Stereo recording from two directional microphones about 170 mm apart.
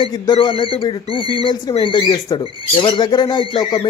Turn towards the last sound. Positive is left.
turn(degrees=30)  # may be behind; listen again after turning